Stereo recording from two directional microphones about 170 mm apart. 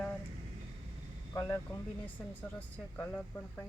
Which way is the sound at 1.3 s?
15° left (ahead or behind).